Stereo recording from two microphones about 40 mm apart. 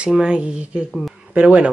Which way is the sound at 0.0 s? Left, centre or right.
Centre.